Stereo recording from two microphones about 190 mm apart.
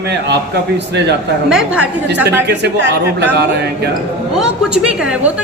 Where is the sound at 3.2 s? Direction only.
60° right (ahead or behind).